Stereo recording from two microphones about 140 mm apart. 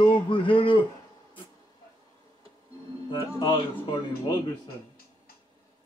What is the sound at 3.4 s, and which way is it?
Speech, 30° left (ahead or behind).